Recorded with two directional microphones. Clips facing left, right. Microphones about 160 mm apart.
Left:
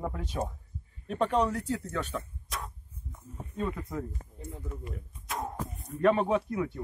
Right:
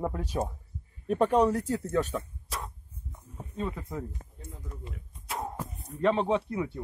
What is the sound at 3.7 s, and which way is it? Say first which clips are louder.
Speech: left 1 dB; 10° right (ahead or behind).